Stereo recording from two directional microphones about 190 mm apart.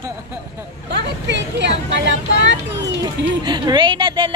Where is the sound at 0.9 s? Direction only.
70° right (ahead or behind).